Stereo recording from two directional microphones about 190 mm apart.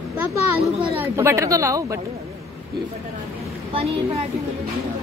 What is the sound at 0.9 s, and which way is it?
A woman's voice, 10° right (ahead or behind).